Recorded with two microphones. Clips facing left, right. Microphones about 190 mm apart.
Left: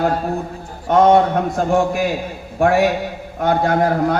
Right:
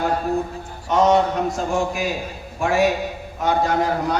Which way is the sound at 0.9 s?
55° left (ahead or behind).